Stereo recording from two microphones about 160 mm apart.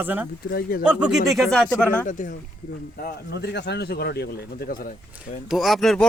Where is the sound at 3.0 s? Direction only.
90° left; by 4.9 s 65° left (ahead or behind).